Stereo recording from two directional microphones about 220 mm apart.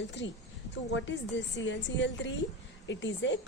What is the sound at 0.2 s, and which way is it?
A woman's voice, 55° left (ahead or behind).